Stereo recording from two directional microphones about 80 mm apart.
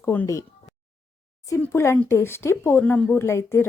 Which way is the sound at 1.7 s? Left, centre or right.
Left.